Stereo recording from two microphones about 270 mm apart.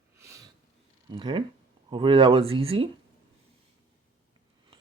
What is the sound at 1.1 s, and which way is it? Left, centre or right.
Speech, centre.